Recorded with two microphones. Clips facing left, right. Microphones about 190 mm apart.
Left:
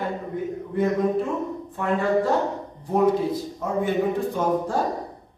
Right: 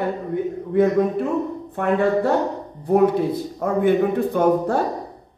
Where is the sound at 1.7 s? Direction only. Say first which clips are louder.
Right 3 dB; 65° right (ahead or behind).